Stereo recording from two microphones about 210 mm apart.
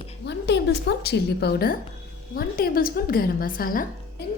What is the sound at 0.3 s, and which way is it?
A woman's voice, 55° left (ahead or behind).